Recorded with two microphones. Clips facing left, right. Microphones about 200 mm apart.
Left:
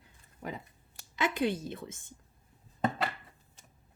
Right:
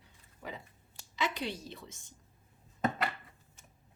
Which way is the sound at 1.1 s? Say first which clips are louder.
Left 6 dB; 50° left (ahead or behind).